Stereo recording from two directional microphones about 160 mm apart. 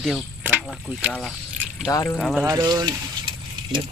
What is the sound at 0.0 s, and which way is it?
Speech, centre (ahead or behind).